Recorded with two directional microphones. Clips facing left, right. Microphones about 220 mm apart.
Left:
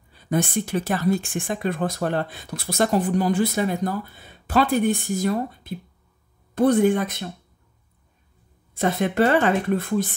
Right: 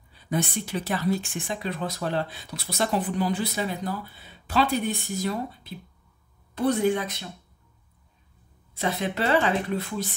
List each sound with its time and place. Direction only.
0.2 s speech: 50° left (ahead or behind)
8.7 s speech: 50° left (ahead or behind)